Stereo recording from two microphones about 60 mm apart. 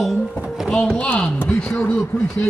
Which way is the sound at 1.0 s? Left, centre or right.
Left.